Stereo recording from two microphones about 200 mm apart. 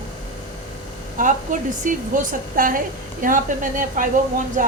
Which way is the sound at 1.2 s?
40° right (ahead or behind).